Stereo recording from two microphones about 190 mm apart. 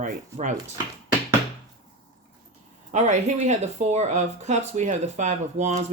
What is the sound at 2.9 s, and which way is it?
Speech, 40° right (ahead or behind).